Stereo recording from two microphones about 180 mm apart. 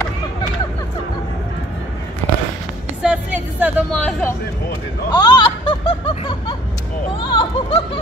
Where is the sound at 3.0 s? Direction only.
5° right (ahead or behind).